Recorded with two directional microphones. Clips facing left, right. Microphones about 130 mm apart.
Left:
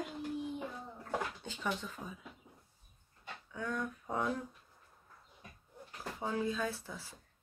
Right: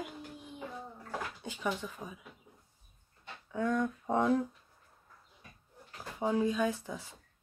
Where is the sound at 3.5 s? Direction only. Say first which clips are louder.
Right 8 dB; 25° right (ahead or behind).